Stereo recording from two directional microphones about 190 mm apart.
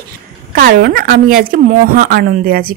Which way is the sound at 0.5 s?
55° right (ahead or behind).